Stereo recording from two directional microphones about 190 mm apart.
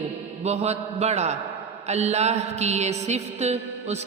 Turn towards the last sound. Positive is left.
turn(degrees=-35)  # may be behind; listen again after turning